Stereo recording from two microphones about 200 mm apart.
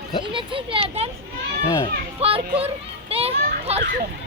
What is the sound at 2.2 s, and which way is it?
A child's voice, 30° right (ahead or behind).